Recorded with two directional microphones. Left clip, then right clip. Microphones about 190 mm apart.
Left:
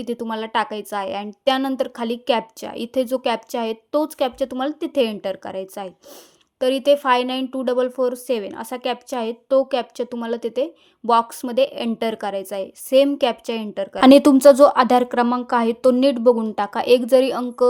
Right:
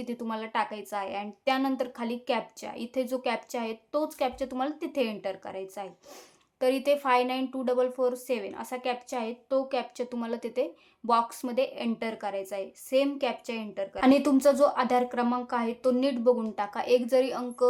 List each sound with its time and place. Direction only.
0.0 s a woman's voice: 30° left (ahead or behind)